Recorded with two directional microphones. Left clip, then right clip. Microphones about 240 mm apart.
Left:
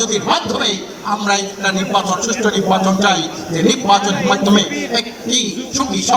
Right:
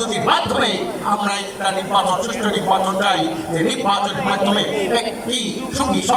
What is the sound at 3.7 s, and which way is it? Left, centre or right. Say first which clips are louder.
A man's voice: left 7 dB; left.